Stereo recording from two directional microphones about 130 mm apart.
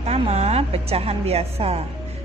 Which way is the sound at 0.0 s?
55° right (ahead or behind).